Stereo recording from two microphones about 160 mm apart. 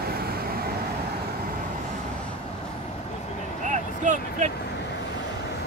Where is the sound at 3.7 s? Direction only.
50° right (ahead or behind).